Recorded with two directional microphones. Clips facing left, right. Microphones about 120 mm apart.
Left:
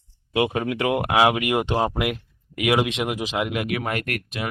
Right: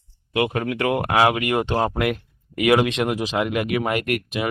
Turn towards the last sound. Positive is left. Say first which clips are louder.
# right 5 dB
turn(degrees=-5)  # may be behind; listen again after turning